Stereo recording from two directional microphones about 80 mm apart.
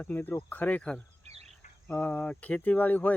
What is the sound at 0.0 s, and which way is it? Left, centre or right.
Speech, left.